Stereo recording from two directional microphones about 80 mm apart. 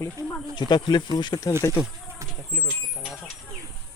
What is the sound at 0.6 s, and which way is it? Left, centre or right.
Speech, left.